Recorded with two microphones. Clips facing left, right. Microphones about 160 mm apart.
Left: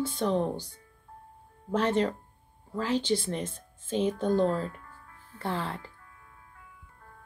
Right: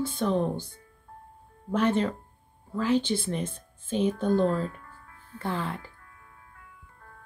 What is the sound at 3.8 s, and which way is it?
Speech, 25° left (ahead or behind).